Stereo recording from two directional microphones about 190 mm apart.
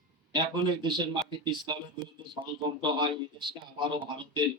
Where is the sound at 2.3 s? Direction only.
25° right (ahead or behind).